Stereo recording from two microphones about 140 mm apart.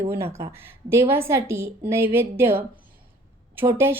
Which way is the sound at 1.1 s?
20° right (ahead or behind).